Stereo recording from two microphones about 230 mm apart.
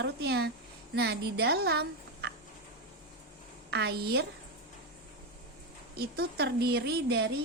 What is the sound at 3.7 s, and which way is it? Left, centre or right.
Speech, right.